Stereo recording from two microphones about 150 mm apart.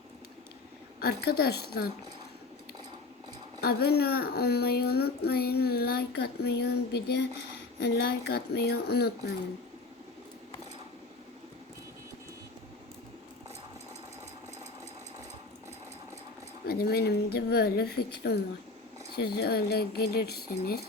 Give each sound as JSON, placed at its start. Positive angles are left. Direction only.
{"t": 0.9, "sound": "a child's voice", "side_deg": 90}
{"t": 3.6, "sound": "a child's voice", "side_deg": 90}
{"t": 16.6, "sound": "a child's voice", "side_deg": 90}